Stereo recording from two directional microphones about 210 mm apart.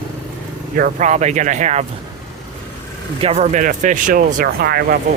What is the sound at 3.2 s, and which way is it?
Speech, 30° right (ahead or behind).